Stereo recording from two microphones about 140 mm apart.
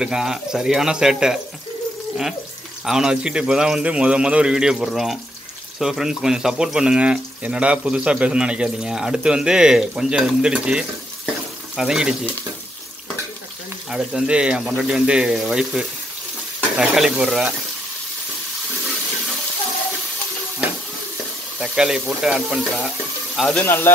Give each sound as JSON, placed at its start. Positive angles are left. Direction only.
{"t": 0.0, "sound": "speech", "side_deg": -5}
{"t": 2.8, "sound": "speech", "side_deg": -5}
{"t": 13.8, "sound": "speech", "side_deg": -5}
{"t": 21.5, "sound": "speech", "side_deg": -5}
{"t": 23.6, "sound": "speech", "side_deg": 15}